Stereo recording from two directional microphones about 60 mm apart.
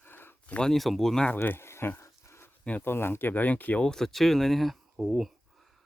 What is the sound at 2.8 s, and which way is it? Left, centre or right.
Speech, left.